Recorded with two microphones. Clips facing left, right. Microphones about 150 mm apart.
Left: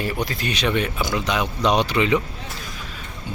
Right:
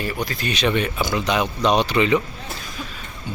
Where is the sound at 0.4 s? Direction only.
5° left (ahead or behind).